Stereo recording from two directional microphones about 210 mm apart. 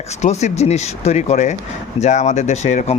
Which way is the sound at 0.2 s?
35° left (ahead or behind).